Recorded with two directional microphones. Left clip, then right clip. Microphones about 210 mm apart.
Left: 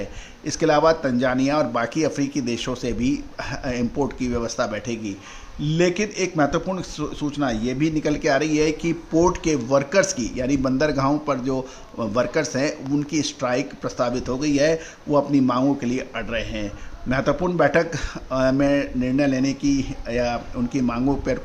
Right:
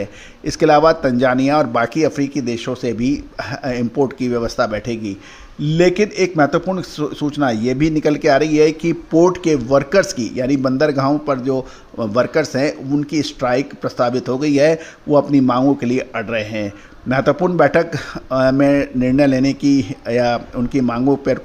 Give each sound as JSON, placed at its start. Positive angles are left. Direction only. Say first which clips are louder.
{"t": 0.4, "sound": "speech", "louder": "right 6 dB", "side_deg": -30}